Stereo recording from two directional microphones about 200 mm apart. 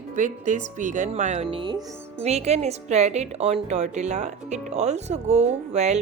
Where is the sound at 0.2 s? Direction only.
40° right (ahead or behind).